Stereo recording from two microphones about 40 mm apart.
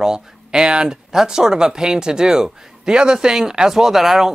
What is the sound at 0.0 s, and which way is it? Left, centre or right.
Speech, centre.